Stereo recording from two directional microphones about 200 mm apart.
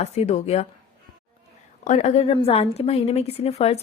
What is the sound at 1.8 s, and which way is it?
A woman's voice, 35° left (ahead or behind).